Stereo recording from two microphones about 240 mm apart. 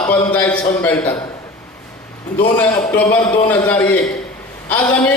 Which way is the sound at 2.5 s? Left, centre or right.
Centre.